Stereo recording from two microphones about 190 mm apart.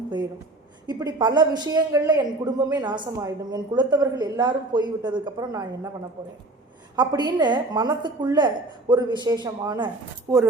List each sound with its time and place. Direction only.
0.9 s a man's voice: 20° right (ahead or behind)
6.9 s a man's voice: 20° right (ahead or behind)